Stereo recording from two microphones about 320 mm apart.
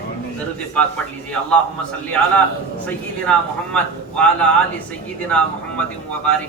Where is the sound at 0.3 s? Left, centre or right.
Centre.